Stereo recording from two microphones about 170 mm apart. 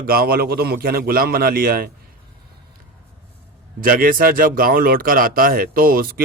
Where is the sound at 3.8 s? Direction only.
55° right (ahead or behind).